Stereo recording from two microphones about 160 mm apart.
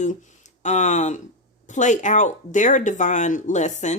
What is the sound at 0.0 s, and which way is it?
Speech, 50° left (ahead or behind).